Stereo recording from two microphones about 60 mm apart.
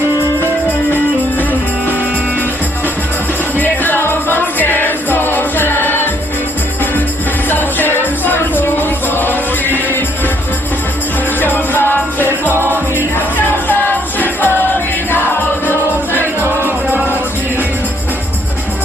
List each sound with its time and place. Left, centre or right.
3.6 s music: left
7.5 s music: left
11.3 s music: left
16.4 s music: right